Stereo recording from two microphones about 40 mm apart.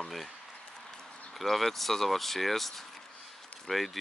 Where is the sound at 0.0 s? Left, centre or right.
Centre.